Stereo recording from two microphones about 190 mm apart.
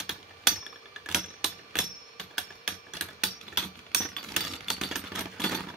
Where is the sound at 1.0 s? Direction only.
Centre (ahead or behind).